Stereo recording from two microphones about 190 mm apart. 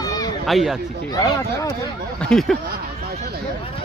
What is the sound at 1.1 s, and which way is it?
Speech, 20° left (ahead or behind).